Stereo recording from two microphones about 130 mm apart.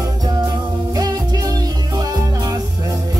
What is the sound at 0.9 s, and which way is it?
Music, 30° right (ahead or behind).